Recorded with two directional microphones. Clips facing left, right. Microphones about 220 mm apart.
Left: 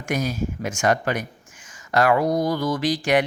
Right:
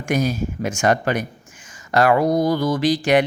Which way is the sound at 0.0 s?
30° right (ahead or behind).